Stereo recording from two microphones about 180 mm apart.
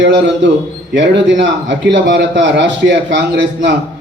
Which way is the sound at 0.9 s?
85° right.